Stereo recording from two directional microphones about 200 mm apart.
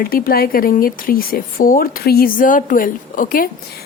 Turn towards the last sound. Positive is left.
turn(degrees=45)  # may be behind; listen again after turning